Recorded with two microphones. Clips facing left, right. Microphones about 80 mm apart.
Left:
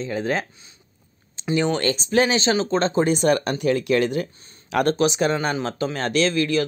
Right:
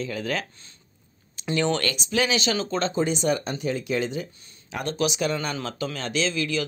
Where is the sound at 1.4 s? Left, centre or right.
Centre.